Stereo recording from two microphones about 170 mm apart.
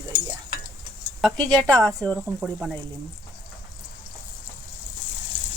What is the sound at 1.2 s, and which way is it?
Speech, 5° left (ahead or behind).